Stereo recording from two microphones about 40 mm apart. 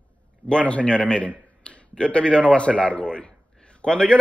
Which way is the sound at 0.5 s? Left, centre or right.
Left.